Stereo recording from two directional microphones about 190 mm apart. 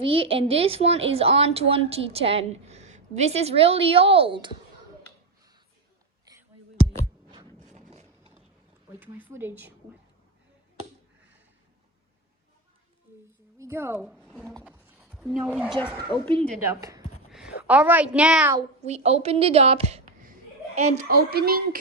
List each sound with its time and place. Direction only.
0.0 s a woman's voice: 30° right (ahead or behind)
7.7 s a sound: 35° right (ahead or behind)
8.9 s a woman's voice: 10° right (ahead or behind)
13.6 s speech: 15° right (ahead or behind)
14.6 s a sound: 5° right (ahead or behind)
16.3 s a woman's voice: 30° right (ahead or behind)
16.6 s a woman's voice: 15° right (ahead or behind)
18.8 s a woman's voice: 35° right (ahead or behind)
21.2 s a woman's voice: 55° right (ahead or behind)